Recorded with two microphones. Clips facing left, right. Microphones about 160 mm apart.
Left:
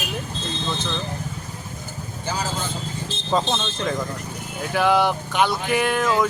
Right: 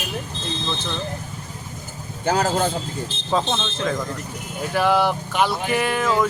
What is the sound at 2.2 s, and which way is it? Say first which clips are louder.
Speech: right 8 dB; 55° right (ahead or behind).